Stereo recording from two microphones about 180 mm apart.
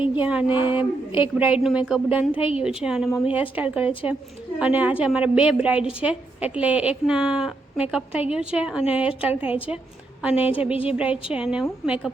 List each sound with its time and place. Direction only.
0.0 s a woman's voice: 10° right (ahead or behind)
0.5 s speech: 25° left (ahead or behind)
1.4 s a woman's voice: 5° right (ahead or behind)